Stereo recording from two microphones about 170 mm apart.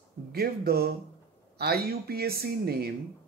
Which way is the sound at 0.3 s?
65° right (ahead or behind).